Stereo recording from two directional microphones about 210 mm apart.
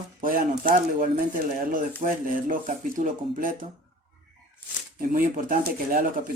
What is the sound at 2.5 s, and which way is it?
Speech, 40° right (ahead or behind).